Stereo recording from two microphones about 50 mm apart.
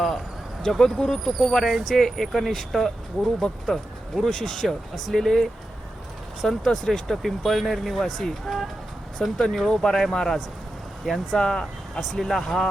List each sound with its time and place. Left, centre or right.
0.6 s speech: centre
11.3 s speech: centre